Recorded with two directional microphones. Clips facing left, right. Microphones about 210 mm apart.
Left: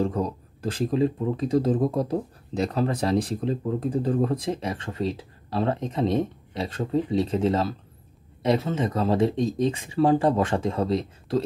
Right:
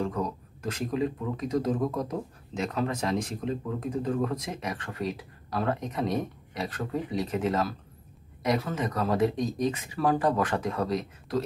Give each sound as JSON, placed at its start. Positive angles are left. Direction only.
{"t": 0.0, "sound": "speech", "side_deg": 30}